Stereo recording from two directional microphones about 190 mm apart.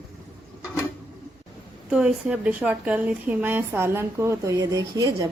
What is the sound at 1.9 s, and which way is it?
Speech, 5° right (ahead or behind).